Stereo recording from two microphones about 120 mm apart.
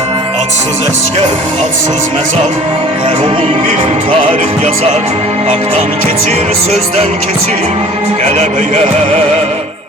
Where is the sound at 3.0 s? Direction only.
45° right (ahead or behind).